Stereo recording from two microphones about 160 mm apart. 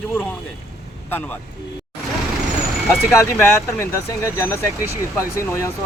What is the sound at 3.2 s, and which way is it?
Speech, 15° left (ahead or behind).